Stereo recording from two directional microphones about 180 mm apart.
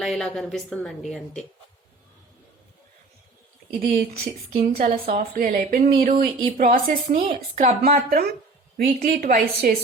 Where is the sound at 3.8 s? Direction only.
55° right (ahead or behind).